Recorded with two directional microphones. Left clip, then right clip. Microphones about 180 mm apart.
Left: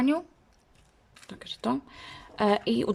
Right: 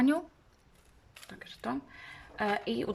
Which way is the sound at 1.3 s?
20° left (ahead or behind).